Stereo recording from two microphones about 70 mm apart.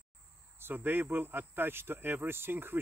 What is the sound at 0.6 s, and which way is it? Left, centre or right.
Speech, right.